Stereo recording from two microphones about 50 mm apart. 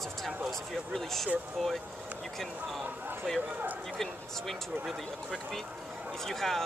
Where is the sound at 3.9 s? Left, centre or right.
Centre.